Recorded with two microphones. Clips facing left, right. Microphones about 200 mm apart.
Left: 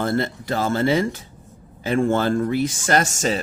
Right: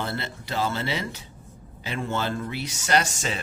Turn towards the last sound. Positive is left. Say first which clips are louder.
# left 5 dB
turn(degrees=40)  # may be behind; listen again after turning